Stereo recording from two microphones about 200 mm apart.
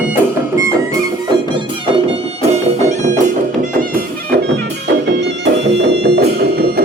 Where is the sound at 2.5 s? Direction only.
35° right (ahead or behind).